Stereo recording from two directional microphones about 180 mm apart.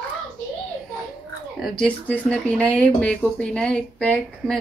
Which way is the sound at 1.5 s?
Centre (ahead or behind).